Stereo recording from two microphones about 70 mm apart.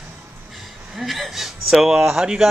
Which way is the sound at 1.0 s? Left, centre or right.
Centre.